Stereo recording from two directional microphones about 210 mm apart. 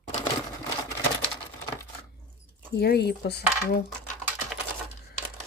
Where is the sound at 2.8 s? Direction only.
50° left (ahead or behind).